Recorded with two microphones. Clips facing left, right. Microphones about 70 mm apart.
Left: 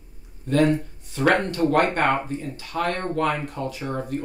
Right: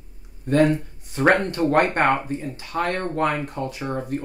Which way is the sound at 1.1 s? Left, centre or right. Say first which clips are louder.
Right 2 dB; right.